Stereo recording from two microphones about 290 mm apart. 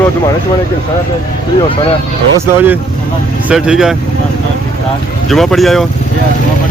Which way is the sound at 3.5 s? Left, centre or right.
Centre.